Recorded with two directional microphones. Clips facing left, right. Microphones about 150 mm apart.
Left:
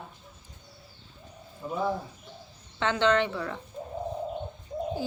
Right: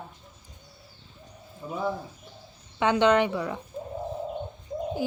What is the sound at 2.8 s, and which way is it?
Speech, 15° right (ahead or behind).